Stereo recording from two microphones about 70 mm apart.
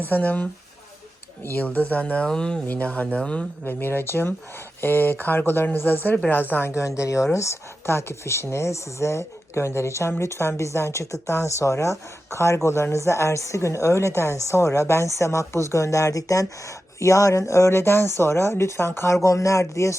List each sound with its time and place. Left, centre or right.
0.0 s speech: left
1.5 s speech: left
2.6 s speech: left
3.6 s speech: left
6.5 s a woman's voice: left